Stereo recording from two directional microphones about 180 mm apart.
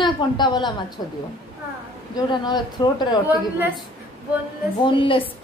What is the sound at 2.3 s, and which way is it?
Speech, 25° left (ahead or behind).